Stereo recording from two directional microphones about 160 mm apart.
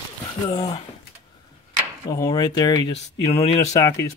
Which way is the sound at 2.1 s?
20° left (ahead or behind).